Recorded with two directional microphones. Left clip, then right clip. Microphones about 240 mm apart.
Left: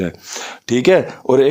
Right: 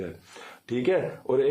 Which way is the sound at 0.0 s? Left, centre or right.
Left.